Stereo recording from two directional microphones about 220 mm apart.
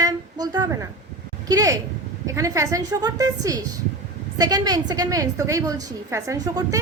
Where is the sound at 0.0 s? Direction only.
20° right (ahead or behind).